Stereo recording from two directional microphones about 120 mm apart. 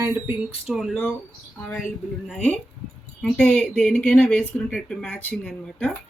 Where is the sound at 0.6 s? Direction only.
Centre (ahead or behind).